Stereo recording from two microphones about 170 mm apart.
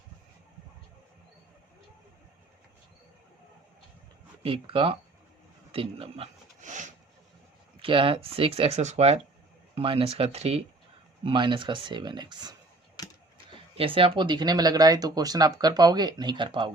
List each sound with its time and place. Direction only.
4.4 s speech: 35° right (ahead or behind)
7.8 s speech: 30° right (ahead or behind)
13.0 s a sound: 25° left (ahead or behind)
13.7 s speech: 30° right (ahead or behind)